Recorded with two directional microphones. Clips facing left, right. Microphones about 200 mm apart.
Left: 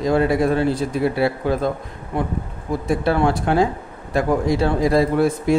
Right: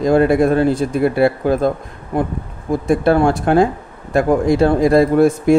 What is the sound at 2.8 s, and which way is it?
A man's voice, 50° right (ahead or behind).